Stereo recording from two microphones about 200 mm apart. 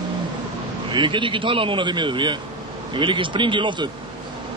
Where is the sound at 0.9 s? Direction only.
25° right (ahead or behind).